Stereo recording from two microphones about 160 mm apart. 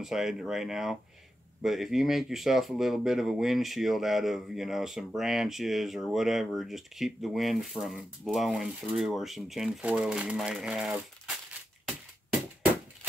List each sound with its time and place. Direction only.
0.0 s speech: centre (ahead or behind)